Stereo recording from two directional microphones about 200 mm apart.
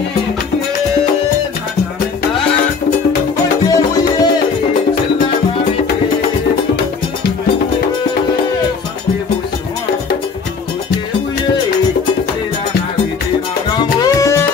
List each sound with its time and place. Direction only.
3.6 s music: 20° left (ahead or behind)
13.7 s music: 20° left (ahead or behind)